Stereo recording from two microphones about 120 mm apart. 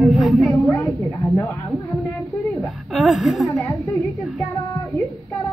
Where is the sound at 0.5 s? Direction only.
25° left (ahead or behind).